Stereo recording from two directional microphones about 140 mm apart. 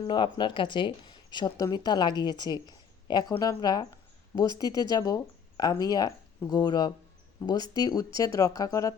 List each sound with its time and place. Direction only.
0.1 s speech: 35° left (ahead or behind)